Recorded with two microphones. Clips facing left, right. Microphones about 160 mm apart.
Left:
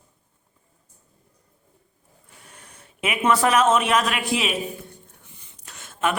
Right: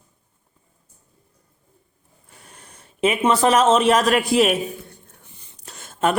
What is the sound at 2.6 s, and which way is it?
A man's voice, 30° right (ahead or behind).